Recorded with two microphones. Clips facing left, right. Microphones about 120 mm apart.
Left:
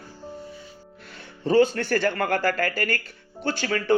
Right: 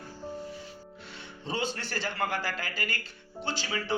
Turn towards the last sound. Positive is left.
turn(degrees=55)  # may be behind; listen again after turning